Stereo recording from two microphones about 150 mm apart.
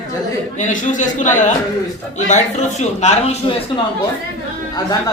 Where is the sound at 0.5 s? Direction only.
60° left (ahead or behind).